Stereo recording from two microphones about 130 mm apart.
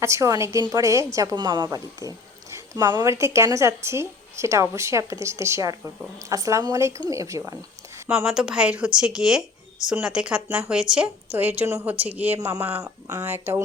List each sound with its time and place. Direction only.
0.0 s a woman's voice: 25° right (ahead or behind)
3.0 s speech: 20° right (ahead or behind)
8.3 s a woman's voice: 5° right (ahead or behind)
12.4 s speech: 25° right (ahead or behind)